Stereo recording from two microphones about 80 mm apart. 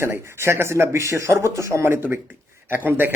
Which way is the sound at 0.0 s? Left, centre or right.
Right.